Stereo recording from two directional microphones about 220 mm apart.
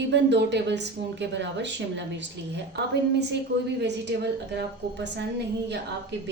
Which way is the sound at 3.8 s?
50° right (ahead or behind).